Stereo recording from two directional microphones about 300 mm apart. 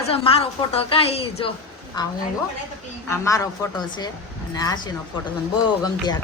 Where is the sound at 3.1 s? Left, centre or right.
Centre.